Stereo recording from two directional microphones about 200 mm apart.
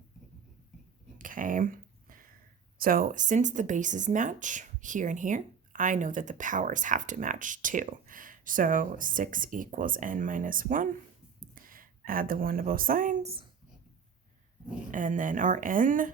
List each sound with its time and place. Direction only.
1.2 s a sound: 40° right (ahead or behind)
2.7 s speech: 45° right (ahead or behind)
14.8 s speech: 40° right (ahead or behind)